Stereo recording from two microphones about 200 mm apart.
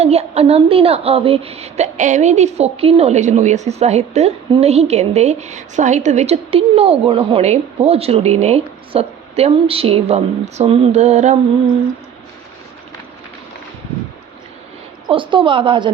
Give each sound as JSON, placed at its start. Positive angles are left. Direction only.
{"t": 0.0, "sound": "a woman's voice", "side_deg": -30}
{"t": 15.0, "sound": "a woman's voice", "side_deg": -25}